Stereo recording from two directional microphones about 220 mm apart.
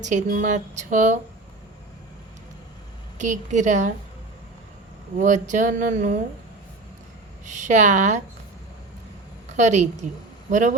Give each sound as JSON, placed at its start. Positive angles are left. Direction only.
{"t": 0.0, "sound": "speech", "side_deg": -35}
{"t": 3.2, "sound": "speech", "side_deg": -35}
{"t": 5.1, "sound": "speech", "side_deg": -35}
{"t": 7.4, "sound": "speech", "side_deg": -35}
{"t": 9.6, "sound": "speech", "side_deg": -35}